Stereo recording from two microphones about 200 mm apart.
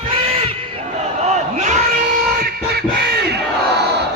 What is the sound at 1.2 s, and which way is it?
Crowd, 35° right (ahead or behind).